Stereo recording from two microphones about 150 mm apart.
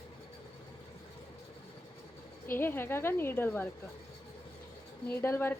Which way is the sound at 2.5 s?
15° left (ahead or behind).